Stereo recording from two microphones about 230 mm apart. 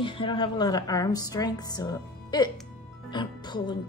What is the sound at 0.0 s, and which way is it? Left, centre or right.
A woman's voice, centre.